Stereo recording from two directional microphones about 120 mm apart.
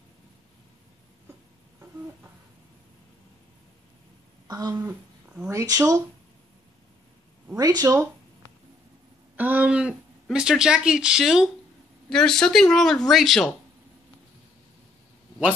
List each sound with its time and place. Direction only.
4.5 s speech: 35° right (ahead or behind)
4.7 s a sound: 15° right (ahead or behind)
5.5 s speech: 30° right (ahead or behind)
7.5 s speech: 30° right (ahead or behind)
9.4 s speech: 10° right (ahead or behind)